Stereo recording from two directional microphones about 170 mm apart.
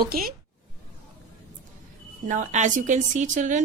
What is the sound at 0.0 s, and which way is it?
Speech, 60° right (ahead or behind).